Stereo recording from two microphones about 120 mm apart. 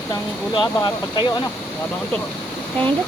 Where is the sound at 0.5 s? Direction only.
30° left (ahead or behind).